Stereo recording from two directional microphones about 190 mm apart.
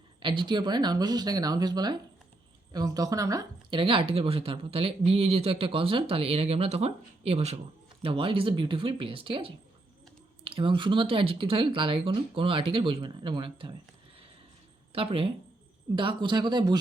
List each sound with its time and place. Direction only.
0.2 s speech: 25° right (ahead or behind)
14.9 s speech: 30° right (ahead or behind)